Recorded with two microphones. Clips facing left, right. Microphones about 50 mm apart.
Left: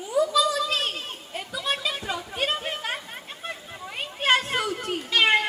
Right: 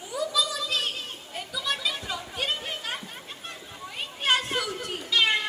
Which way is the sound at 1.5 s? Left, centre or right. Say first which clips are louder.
Left 2 dB; left.